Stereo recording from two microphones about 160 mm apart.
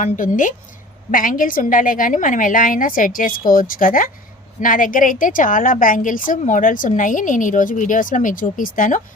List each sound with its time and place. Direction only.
0.0 s a woman's voice: 55° left (ahead or behind)